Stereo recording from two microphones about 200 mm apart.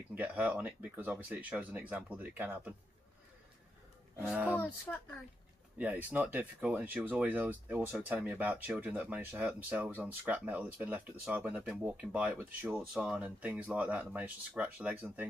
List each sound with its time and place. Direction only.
0.1 s speech: 10° right (ahead or behind)
4.2 s speech: 5° right (ahead or behind)
4.6 s speech: 10° left (ahead or behind)
5.8 s speech: 5° right (ahead or behind)